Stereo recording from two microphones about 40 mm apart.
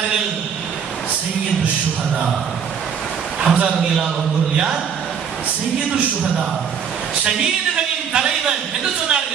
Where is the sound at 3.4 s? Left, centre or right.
Right.